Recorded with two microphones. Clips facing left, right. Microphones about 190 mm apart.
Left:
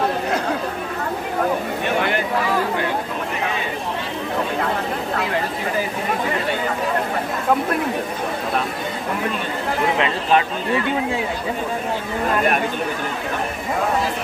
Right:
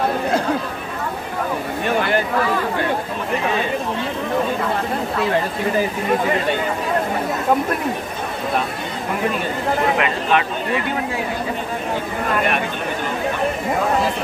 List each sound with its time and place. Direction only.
9.9 s speech: 30° left (ahead or behind)